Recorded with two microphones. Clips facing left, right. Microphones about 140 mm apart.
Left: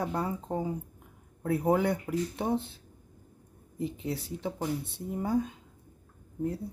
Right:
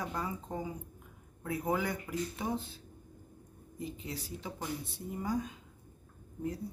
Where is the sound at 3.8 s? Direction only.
65° left (ahead or behind).